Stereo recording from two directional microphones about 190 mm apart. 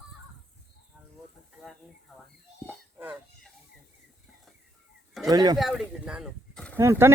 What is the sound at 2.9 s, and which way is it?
Chicken, 10° right (ahead or behind).